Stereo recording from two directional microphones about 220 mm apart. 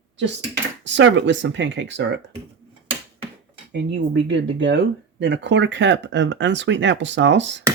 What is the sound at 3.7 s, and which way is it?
Speech, 50° right (ahead or behind).